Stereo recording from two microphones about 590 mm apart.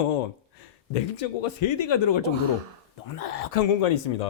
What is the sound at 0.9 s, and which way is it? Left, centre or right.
Speech, left.